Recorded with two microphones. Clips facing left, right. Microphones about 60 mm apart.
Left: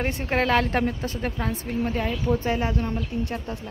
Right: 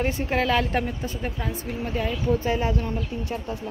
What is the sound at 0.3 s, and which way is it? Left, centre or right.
Speech, left.